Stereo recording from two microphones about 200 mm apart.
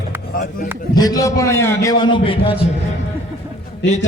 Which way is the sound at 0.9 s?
20° left (ahead or behind).